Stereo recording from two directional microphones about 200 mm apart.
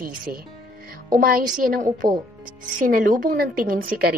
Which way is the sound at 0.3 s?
45° right (ahead or behind).